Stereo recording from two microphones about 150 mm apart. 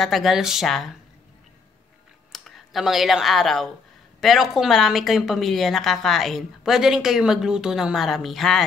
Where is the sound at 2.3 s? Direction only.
Centre (ahead or behind).